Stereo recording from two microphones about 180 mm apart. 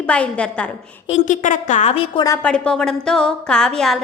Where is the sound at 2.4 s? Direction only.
5° left (ahead or behind).